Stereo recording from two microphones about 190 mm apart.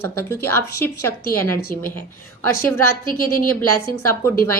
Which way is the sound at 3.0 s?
50° left (ahead or behind).